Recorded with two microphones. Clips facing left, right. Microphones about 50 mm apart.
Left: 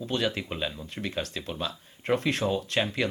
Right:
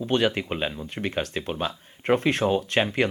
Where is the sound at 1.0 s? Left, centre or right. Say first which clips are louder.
Right 5 dB; right.